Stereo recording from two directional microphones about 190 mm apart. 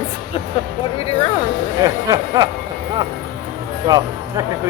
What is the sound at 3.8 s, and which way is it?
Speech, 20° right (ahead or behind).